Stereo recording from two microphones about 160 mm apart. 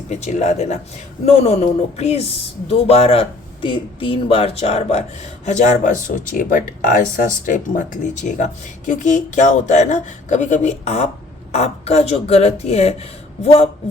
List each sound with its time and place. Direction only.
0.1 s speech: 45° left (ahead or behind)